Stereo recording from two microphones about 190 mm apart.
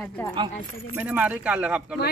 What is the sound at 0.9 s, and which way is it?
Speech, 10° right (ahead or behind).